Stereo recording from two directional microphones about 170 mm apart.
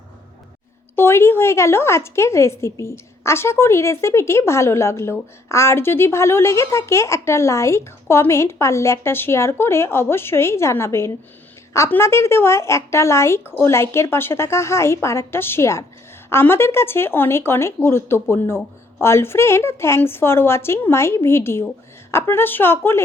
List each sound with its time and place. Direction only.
0.9 s a woman's voice: 15° left (ahead or behind)